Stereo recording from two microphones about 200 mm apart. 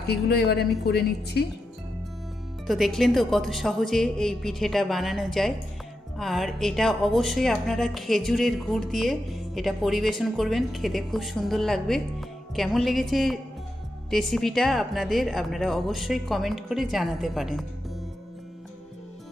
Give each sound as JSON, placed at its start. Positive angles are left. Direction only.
{"t": 0.0, "sound": "a woman's voice", "side_deg": 55}
{"t": 2.6, "sound": "speech", "side_deg": 0}